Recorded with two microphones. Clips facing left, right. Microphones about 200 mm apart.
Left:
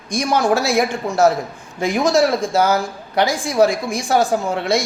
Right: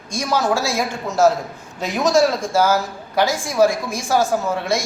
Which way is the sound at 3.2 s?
15° left (ahead or behind).